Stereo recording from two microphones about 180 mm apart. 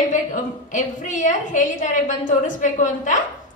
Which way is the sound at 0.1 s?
45° left (ahead or behind).